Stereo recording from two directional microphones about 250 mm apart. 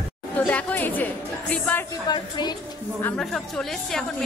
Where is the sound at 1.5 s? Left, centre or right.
Centre.